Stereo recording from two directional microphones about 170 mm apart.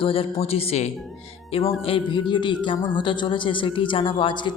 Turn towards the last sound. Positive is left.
turn(degrees=30)  # may be behind; listen again after turning